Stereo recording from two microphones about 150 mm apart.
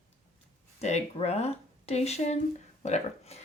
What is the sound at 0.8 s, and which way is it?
Speech, 45° left (ahead or behind).